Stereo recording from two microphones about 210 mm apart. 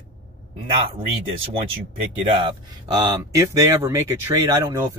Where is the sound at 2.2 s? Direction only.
20° right (ahead or behind).